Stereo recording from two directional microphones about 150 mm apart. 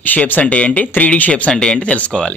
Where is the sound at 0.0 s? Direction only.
10° left (ahead or behind).